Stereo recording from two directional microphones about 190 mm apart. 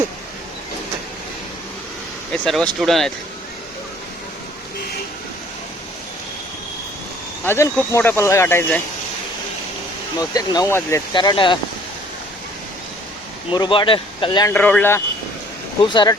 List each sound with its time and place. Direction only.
2.3 s speech: 5° left (ahead or behind)
7.4 s speech: 10° left (ahead or behind)
10.2 s speech: 20° left (ahead or behind)
13.5 s speech: 25° left (ahead or behind)
14.5 s speech: 10° left (ahead or behind)
15.8 s speech: 25° left (ahead or behind)